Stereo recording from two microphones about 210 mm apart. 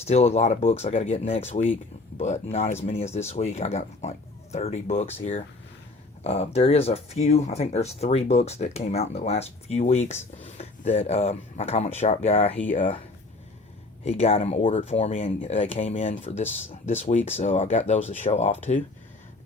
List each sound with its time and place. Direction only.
0.0 s speech: 30° left (ahead or behind)
14.0 s speech: 30° left (ahead or behind)